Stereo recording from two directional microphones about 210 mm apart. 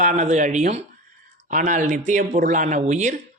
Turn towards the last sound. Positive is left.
turn(degrees=-35)  # may be behind; listen again after turning